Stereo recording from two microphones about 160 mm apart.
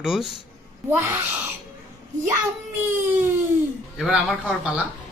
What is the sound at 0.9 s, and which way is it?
Speech, 15° right (ahead or behind).